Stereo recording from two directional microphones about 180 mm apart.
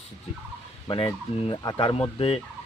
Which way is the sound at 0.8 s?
25° left (ahead or behind).